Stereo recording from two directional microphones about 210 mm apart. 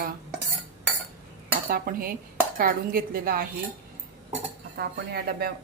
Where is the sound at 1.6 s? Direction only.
45° right (ahead or behind).